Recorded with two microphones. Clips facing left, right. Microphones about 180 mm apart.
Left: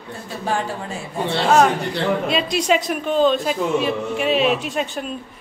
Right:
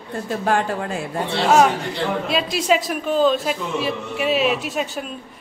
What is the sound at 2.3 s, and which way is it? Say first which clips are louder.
A man's voice: even; centre (ahead or behind).